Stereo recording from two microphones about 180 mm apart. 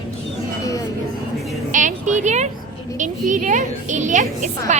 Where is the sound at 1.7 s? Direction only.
45° right (ahead or behind).